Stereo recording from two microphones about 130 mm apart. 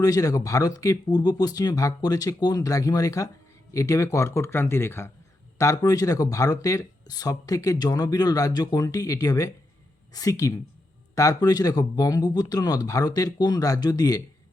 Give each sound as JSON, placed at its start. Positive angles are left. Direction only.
{"t": 0.0, "sound": "speech", "side_deg": 30}